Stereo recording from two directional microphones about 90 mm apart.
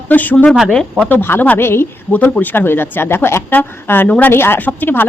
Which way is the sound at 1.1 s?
25° left (ahead or behind).